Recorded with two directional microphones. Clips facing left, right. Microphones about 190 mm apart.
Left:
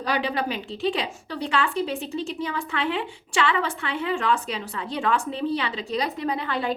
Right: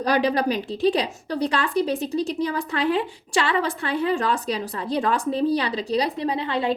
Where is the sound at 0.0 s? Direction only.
40° right (ahead or behind).